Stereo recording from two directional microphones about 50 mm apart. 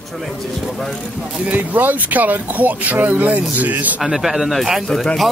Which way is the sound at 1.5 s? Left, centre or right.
Right.